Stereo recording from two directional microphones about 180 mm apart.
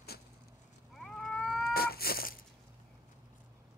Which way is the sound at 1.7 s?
55° left (ahead or behind).